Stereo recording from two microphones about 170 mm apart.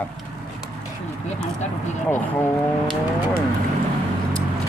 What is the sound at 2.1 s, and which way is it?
Speech, 10° left (ahead or behind).